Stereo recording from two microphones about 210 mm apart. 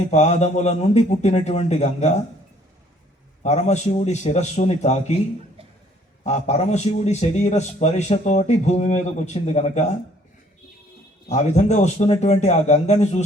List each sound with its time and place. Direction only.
0.1 s a man's voice: 30° left (ahead or behind)
3.4 s a man's voice: 30° left (ahead or behind)
6.2 s a man's voice: 35° left (ahead or behind)
11.3 s a man's voice: 35° left (ahead or behind)